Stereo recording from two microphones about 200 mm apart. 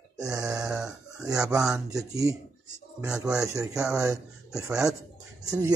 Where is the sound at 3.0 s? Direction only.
5° right (ahead or behind).